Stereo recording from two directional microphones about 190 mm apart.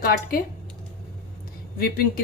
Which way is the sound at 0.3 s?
50° left (ahead or behind).